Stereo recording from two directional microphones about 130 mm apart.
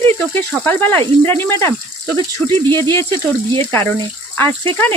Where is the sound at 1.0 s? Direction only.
45° right (ahead or behind).